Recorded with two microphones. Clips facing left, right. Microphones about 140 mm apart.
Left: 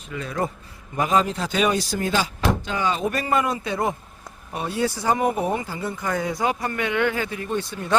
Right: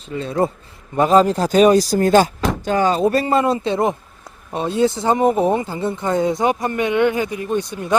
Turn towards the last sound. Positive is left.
turn(degrees=-15)  # may be behind; listen again after turning